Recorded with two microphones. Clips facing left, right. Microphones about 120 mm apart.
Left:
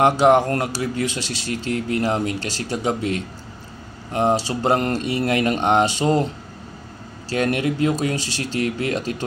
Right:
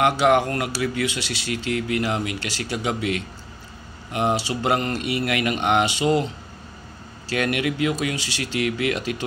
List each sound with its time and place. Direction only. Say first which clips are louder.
0.0 s speech: left 3 dB; 35° left (ahead or behind)